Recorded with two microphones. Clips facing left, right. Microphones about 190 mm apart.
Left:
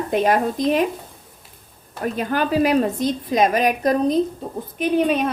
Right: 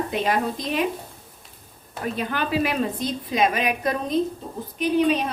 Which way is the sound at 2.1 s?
45° left (ahead or behind).